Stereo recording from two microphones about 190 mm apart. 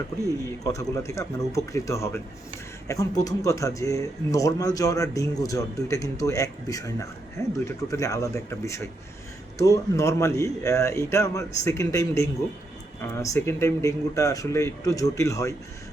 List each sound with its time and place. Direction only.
0.3 s a man's voice: 15° left (ahead or behind)